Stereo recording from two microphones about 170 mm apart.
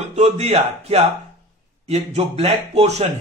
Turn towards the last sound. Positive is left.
turn(degrees=-35)  # may be behind; listen again after turning